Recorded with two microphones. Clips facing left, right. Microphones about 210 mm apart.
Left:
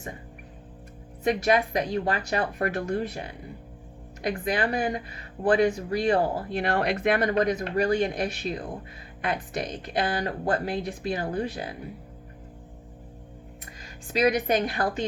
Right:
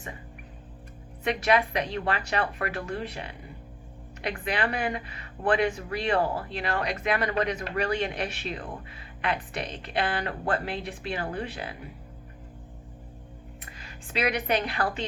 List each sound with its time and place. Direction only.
1.2 s a woman's voice: 40° left (ahead or behind)
13.8 s a woman's voice: 40° left (ahead or behind)